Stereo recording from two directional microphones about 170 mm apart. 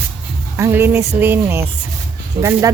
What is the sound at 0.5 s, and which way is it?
A woman's voice, 15° right (ahead or behind).